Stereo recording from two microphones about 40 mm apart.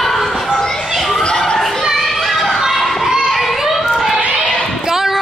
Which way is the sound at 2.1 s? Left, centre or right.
Centre.